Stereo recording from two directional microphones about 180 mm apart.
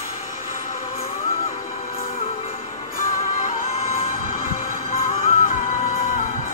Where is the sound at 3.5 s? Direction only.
40° left (ahead or behind).